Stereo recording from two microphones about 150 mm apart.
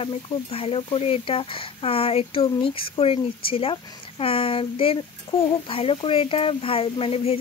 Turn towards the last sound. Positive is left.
turn(degrees=40)  # may be behind; listen again after turning